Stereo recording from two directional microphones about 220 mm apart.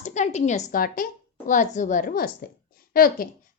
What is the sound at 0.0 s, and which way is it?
A woman's voice, 30° left (ahead or behind).